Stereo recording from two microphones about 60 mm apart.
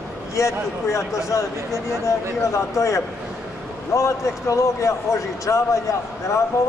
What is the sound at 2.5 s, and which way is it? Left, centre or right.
A man's voice, left.